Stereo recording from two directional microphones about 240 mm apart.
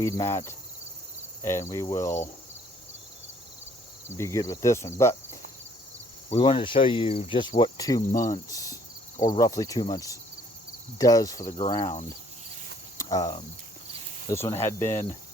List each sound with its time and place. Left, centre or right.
0.0 s speech: centre
4.2 s speech: centre
6.3 s cricket: left
8.2 s speech: centre